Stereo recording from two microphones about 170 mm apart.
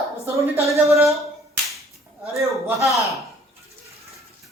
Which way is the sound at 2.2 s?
20° right (ahead or behind).